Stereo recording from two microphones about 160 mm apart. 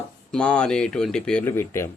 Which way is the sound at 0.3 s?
5° left (ahead or behind).